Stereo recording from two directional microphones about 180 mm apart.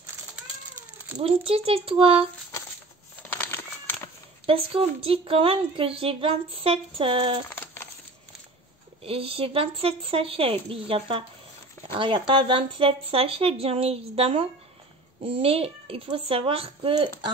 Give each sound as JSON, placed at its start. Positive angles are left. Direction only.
{"t": 1.1, "sound": "a woman's voice", "side_deg": -35}
{"t": 3.3, "sound": "cat", "side_deg": 10}
{"t": 4.5, "sound": "a woman's voice", "side_deg": -30}
{"t": 7.4, "sound": "a sound", "side_deg": 15}
{"t": 9.0, "sound": "a woman's voice", "side_deg": -30}